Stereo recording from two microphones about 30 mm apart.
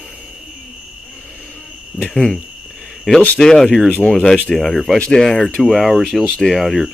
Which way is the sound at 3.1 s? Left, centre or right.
Right.